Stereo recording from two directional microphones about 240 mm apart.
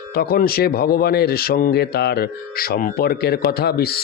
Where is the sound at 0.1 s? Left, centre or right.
Left.